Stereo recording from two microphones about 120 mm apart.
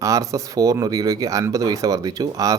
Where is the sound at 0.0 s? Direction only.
25° right (ahead or behind).